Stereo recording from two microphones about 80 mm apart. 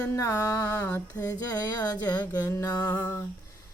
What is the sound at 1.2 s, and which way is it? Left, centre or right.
Music, left.